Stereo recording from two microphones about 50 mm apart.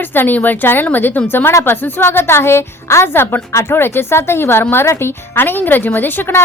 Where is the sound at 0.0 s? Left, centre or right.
Left.